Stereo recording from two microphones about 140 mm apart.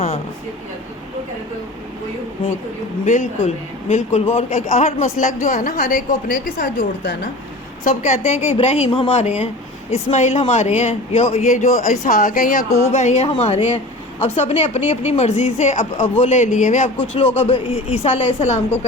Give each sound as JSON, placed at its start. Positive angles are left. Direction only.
{"t": 3.1, "sound": "speech", "side_deg": 60}
{"t": 7.9, "sound": "speech", "side_deg": 55}
{"t": 11.9, "sound": "speech", "side_deg": 85}
{"t": 12.9, "sound": "speech", "side_deg": 55}
{"t": 17.4, "sound": "speech", "side_deg": 45}